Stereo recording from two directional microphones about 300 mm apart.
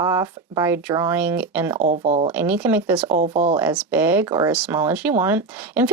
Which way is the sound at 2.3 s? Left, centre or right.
Centre.